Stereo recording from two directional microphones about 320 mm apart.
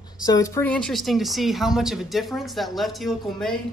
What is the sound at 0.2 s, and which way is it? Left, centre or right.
Speech, centre.